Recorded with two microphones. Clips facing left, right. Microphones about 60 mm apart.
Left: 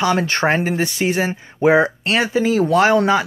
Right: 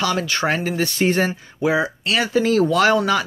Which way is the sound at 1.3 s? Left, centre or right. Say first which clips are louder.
Left 6 dB; left.